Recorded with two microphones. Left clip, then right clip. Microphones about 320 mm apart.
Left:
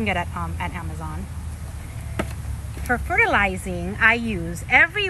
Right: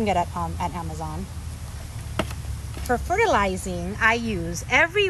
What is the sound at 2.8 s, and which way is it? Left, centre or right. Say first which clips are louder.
A woman's voice: left 1 dB; centre.